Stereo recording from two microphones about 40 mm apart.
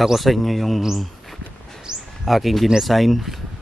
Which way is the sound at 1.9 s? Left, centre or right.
Centre.